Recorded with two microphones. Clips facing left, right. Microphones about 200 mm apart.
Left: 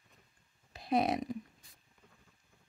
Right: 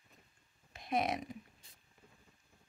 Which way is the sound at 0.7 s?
35° left (ahead or behind).